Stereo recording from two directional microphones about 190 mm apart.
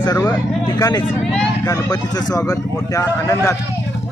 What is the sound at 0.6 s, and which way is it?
Speech, 20° left (ahead or behind).